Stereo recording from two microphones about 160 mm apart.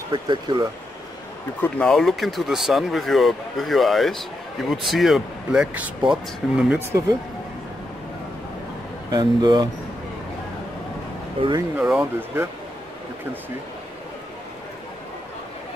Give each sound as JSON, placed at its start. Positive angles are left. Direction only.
{"t": 0.1, "sound": "speech", "side_deg": -25}
{"t": 1.6, "sound": "speech", "side_deg": 5}
{"t": 9.1, "sound": "speech", "side_deg": -25}
{"t": 11.7, "sound": "speech", "side_deg": -10}